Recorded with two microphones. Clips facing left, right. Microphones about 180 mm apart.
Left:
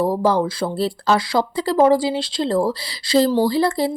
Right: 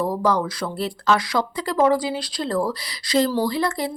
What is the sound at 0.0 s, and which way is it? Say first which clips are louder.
Speech: left 3 dB; 30° left (ahead or behind).